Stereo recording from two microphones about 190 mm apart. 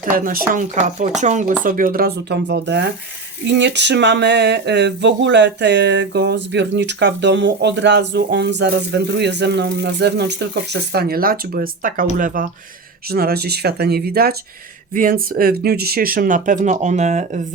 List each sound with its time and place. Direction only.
0.3 s speech: 45° right (ahead or behind)